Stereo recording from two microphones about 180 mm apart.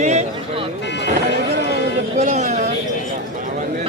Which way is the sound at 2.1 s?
40° right (ahead or behind).